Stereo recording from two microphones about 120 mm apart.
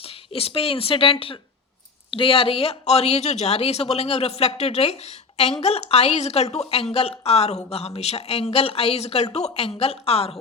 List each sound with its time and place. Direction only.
0.0 s speech: 55° left (ahead or behind)